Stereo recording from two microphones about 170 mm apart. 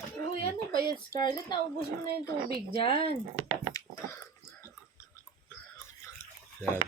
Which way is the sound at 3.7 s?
20° left (ahead or behind).